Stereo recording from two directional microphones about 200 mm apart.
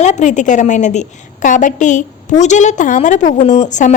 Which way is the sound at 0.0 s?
35° left (ahead or behind).